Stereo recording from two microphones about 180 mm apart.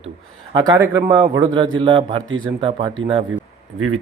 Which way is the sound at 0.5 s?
25° right (ahead or behind).